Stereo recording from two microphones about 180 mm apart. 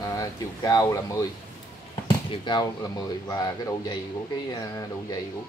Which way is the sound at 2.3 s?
25° left (ahead or behind).